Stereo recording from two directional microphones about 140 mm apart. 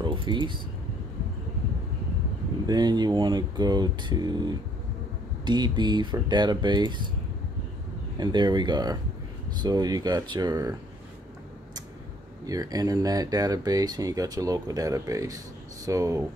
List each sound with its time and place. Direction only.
0.0 s speech: 35° right (ahead or behind)
2.6 s speech: 30° right (ahead or behind)
5.4 s speech: 30° right (ahead or behind)
8.2 s speech: 35° right (ahead or behind)
12.4 s speech: 25° right (ahead or behind)